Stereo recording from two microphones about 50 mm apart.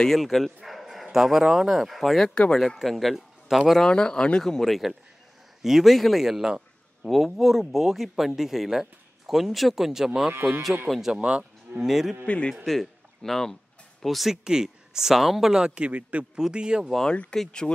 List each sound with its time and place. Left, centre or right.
0.2 s bow-wow: centre
1.1 s speech: centre
2.8 s speech: centre
3.7 s speech: centre
6.2 s a sound: centre
7.1 s speech: centre
11.1 s a man's voice: right
11.8 s speech: centre
12.6 s speech: centre
14.4 s speech: centre
15.6 s a man's voice: right
16.3 s speech: centre
17.1 s speech: left